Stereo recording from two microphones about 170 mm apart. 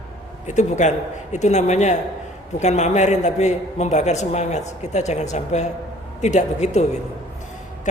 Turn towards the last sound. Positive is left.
turn(degrees=40)  # may be behind; listen again after turning